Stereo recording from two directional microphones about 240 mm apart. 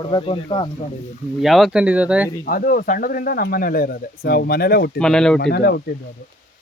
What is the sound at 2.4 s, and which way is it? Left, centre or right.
Speech, left.